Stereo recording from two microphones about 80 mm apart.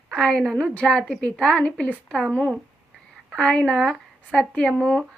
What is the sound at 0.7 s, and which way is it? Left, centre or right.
A woman's voice, centre.